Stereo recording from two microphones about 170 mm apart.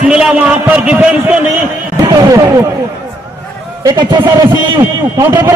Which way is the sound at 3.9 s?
25° right (ahead or behind).